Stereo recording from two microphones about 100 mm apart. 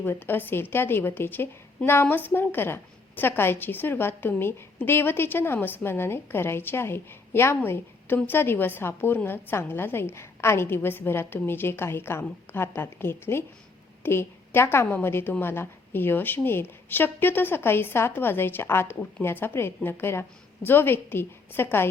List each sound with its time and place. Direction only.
0.0 s a woman's voice: 20° left (ahead or behind)